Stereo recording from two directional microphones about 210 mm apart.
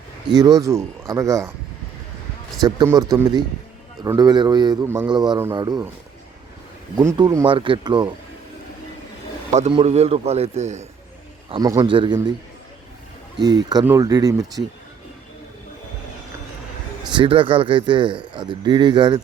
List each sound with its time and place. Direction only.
0.3 s speech: 20° right (ahead or behind)
2.6 s a man's voice: 20° right (ahead or behind)
6.9 s a man's voice: 15° right (ahead or behind)
9.5 s a man's voice: 30° right (ahead or behind)
11.5 s a man's voice: 15° right (ahead or behind)
13.4 s speech: 20° right (ahead or behind)
17.1 s a man's voice: 25° right (ahead or behind)